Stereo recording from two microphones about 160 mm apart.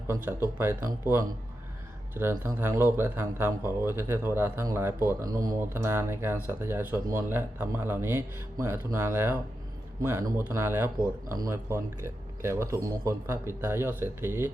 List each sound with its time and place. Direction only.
0.1 s speech: 15° right (ahead or behind)
2.1 s speech: 15° right (ahead or behind)